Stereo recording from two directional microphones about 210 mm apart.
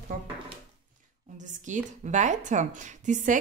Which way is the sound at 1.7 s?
35° right (ahead or behind).